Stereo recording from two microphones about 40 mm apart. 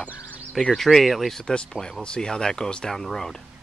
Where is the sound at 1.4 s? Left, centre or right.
Centre.